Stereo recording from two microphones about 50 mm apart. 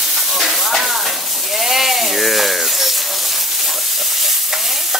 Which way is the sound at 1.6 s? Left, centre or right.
Centre.